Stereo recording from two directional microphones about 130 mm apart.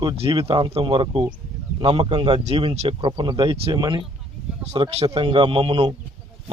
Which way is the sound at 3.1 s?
35° right (ahead or behind).